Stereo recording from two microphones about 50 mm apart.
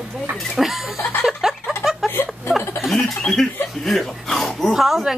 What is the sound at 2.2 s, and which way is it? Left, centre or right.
Chuckle, left.